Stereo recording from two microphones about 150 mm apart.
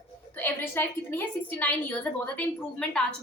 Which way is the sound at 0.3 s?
15° left (ahead or behind).